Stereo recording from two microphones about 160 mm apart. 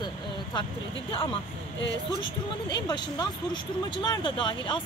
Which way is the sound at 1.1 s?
35° left (ahead or behind).